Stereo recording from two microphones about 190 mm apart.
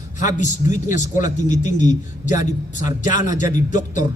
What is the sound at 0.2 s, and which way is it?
A man's voice, 40° left (ahead or behind).